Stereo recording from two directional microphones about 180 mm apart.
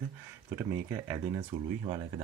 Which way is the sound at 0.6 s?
15° right (ahead or behind).